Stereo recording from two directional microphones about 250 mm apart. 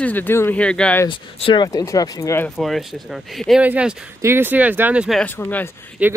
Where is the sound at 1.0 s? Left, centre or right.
Centre.